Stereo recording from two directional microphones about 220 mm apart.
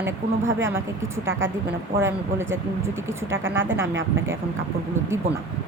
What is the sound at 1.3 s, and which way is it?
Speech, 60° right (ahead or behind).